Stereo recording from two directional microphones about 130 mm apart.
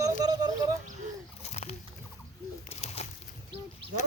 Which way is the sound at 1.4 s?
55° left (ahead or behind).